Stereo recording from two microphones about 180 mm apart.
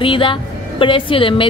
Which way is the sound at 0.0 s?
30° left (ahead or behind).